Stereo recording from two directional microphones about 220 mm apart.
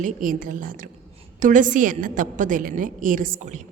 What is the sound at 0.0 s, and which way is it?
A woman's voice, 40° right (ahead or behind).